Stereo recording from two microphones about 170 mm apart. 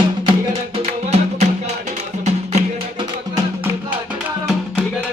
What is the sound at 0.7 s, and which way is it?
Music, 40° right (ahead or behind).